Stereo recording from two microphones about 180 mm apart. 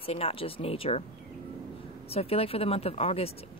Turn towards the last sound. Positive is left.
turn(degrees=35)  # may be behind; listen again after turning